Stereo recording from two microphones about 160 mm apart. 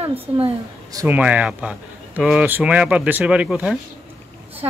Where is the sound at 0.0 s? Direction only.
35° right (ahead or behind).